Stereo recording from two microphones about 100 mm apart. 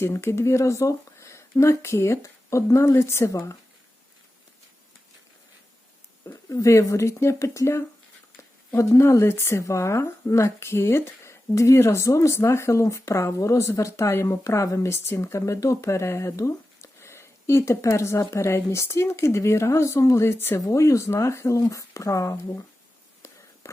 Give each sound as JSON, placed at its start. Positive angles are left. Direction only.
{"t": 0.0, "sound": "speech", "side_deg": 25}
{"t": 6.2, "sound": "speech", "side_deg": 30}